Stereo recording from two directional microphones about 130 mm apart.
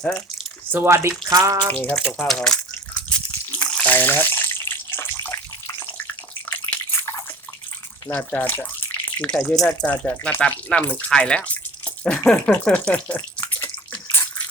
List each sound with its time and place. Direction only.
0.7 s speech: 15° right (ahead or behind)
1.8 s speech: 10° left (ahead or behind)
3.6 s bathtub: 10° left (ahead or behind)
8.1 s speech: 15° left (ahead or behind)
13.5 s bathtub: 20° left (ahead or behind)